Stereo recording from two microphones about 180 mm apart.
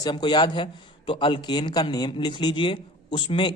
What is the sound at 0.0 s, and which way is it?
A man's voice, 25° left (ahead or behind).